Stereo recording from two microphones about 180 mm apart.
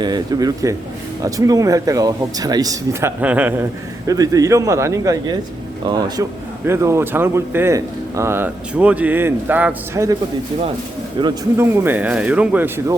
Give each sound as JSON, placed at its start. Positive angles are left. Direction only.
{"t": 0.0, "sound": "speech", "side_deg": -20}
{"t": 3.2, "sound": "speech", "side_deg": -10}
{"t": 4.0, "sound": "speech", "side_deg": -20}
{"t": 11.2, "sound": "speech", "side_deg": -25}
{"t": 11.5, "sound": "speech", "side_deg": -15}